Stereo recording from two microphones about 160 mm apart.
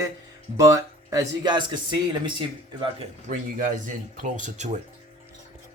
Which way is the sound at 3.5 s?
55° right (ahead or behind).